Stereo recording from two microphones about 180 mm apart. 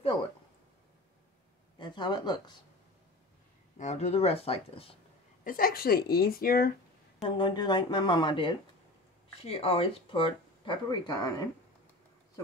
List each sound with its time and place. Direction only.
1.8 s speech: 25° left (ahead or behind)
3.7 s speech: 40° left (ahead or behind)
5.4 s speech: 50° left (ahead or behind)
7.2 s speech: 25° left (ahead or behind)